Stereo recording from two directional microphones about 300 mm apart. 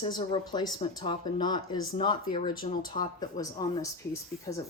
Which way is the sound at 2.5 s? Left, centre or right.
Left.